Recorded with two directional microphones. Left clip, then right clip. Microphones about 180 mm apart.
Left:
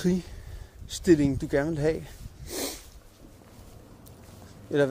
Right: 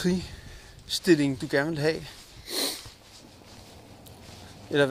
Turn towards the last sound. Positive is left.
turn(degrees=20)  # may be behind; listen again after turning